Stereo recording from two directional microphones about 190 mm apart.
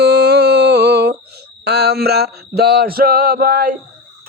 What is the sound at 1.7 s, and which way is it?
Male singing, 55° right (ahead or behind).